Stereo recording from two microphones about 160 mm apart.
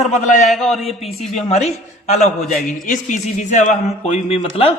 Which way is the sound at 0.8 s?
40° left (ahead or behind).